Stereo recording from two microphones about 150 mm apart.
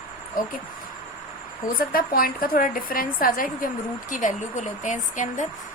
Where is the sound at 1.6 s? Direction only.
70° left (ahead or behind).